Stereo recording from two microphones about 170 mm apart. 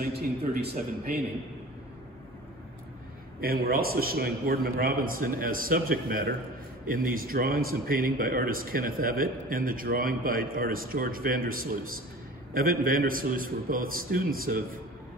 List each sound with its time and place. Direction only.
0.0 s speech: 65° right (ahead or behind)
3.3 s speech: 60° right (ahead or behind)